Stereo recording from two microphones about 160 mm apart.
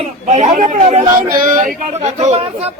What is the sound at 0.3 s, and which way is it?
Speech, 45° right (ahead or behind).